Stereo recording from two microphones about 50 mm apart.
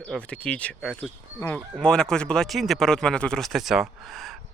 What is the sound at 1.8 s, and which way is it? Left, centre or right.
Speech, centre.